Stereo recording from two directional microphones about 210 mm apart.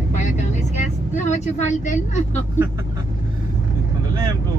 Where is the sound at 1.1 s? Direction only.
35° left (ahead or behind).